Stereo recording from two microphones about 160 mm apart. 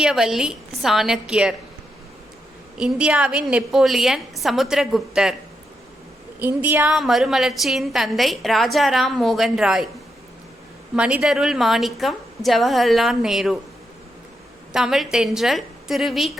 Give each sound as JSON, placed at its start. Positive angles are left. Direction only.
{"t": 0.0, "sound": "a woman's voice", "side_deg": -5}
{"t": 2.7, "sound": "a woman's voice", "side_deg": -5}
{"t": 6.4, "sound": "a woman's voice", "side_deg": -10}
{"t": 10.9, "sound": "a woman's voice", "side_deg": -5}
{"t": 14.7, "sound": "a woman's voice", "side_deg": -5}